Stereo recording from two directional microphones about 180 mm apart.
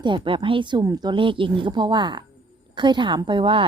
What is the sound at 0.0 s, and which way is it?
A woman's voice, 25° right (ahead or behind).